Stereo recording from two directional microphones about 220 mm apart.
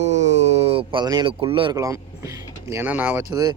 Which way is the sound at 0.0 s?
30° right (ahead or behind).